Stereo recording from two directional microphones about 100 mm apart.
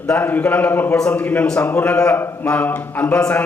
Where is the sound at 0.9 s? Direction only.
10° left (ahead or behind).